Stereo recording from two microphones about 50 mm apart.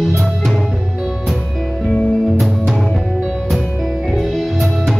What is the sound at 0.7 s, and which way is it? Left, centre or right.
Music, centre.